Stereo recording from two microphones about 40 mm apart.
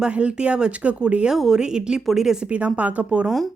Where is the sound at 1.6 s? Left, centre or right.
Right.